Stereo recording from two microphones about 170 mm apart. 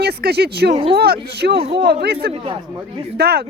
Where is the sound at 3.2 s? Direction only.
70° right (ahead or behind).